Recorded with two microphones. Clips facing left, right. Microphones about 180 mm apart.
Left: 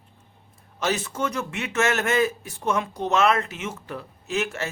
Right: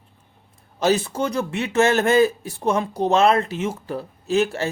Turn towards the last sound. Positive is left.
turn(degrees=-35)  # may be behind; listen again after turning